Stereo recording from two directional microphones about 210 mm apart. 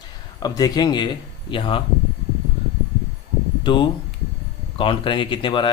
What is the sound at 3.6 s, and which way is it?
Speech, 25° left (ahead or behind).